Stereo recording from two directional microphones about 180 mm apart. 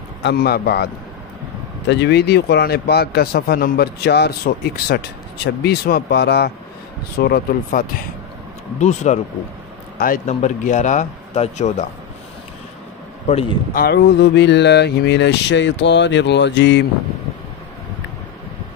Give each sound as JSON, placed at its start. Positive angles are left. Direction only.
{"t": 0.2, "sound": "a man's voice", "side_deg": 65}
{"t": 1.9, "sound": "a man's voice", "side_deg": 75}
{"t": 7.2, "sound": "a man's voice", "side_deg": 55}
{"t": 8.7, "sound": "a man's voice", "side_deg": 40}
{"t": 9.9, "sound": "a man's voice", "side_deg": 50}
{"t": 13.7, "sound": "speech", "side_deg": 65}